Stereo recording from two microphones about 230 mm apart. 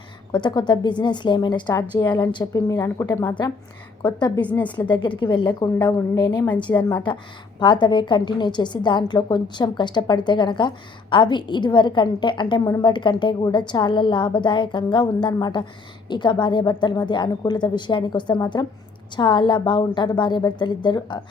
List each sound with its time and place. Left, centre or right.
0.3 s a woman's voice: centre
4.9 s a woman's voice: centre
6.7 s a woman's voice: centre
7.6 s a woman's voice: centre